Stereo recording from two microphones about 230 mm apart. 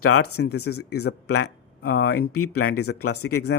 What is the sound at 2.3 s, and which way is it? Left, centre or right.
Speech, left.